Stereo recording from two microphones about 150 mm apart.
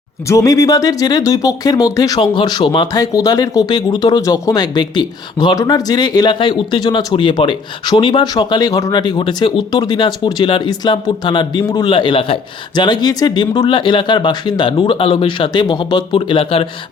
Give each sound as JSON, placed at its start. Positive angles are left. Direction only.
{"t": 0.3, "sound": "speech", "side_deg": 20}